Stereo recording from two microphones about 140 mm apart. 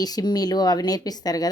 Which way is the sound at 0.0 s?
30° left (ahead or behind).